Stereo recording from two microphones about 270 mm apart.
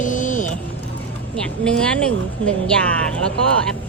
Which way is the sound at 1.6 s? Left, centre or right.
Centre.